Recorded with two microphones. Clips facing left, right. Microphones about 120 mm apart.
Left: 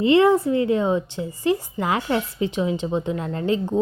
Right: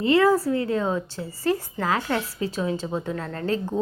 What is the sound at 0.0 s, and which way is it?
A woman's voice, 25° left (ahead or behind).